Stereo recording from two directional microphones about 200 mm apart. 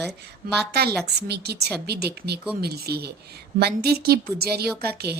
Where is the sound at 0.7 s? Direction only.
55° right (ahead or behind).